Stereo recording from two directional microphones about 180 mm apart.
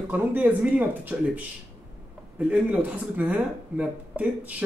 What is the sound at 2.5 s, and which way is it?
Speech, 10° right (ahead or behind).